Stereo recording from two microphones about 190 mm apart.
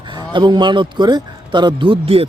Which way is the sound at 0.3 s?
25° right (ahead or behind).